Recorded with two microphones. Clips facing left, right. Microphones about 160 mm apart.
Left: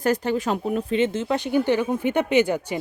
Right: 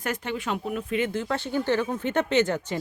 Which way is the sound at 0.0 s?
35° left (ahead or behind).